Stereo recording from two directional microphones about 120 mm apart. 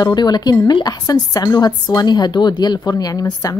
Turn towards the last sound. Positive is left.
turn(degrees=30)  # may be behind; listen again after turning